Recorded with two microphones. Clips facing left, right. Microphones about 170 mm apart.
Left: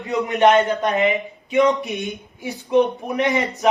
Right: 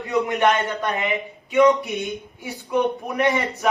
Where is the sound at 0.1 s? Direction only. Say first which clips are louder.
Left 3 dB; 20° left (ahead or behind).